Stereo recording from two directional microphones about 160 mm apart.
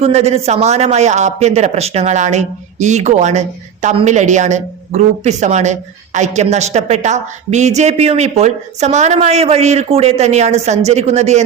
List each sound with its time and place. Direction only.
0.0 s a woman's voice: 40° right (ahead or behind)